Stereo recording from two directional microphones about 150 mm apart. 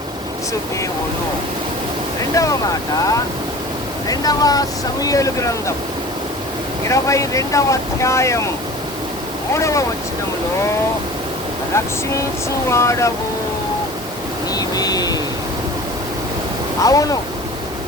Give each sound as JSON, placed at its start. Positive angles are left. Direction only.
{"t": 2.3, "sound": "speech", "side_deg": 20}
{"t": 4.1, "sound": "speech", "side_deg": 25}
{"t": 6.8, "sound": "speech", "side_deg": 20}
{"t": 9.6, "sound": "speech", "side_deg": 20}
{"t": 12.7, "sound": "speech", "side_deg": 20}
{"t": 14.5, "sound": "vehicle", "side_deg": 25}
{"t": 16.8, "sound": "speech", "side_deg": 25}